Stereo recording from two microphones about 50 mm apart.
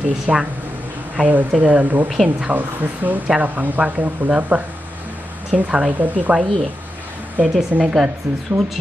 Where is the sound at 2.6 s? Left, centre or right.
Right.